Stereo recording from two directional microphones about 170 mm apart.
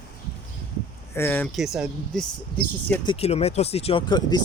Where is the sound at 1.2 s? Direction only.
15° left (ahead or behind).